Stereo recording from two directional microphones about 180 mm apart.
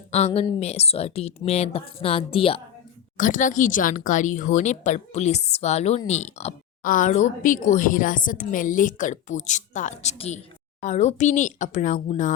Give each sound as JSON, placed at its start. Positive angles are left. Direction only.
{"t": 0.1, "sound": "a woman's voice", "side_deg": 35}
{"t": 3.2, "sound": "a woman's voice", "side_deg": 45}